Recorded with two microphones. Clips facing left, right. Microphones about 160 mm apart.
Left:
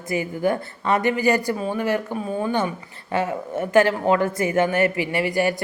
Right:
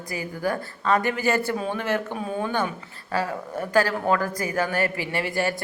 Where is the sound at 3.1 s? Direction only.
20° left (ahead or behind).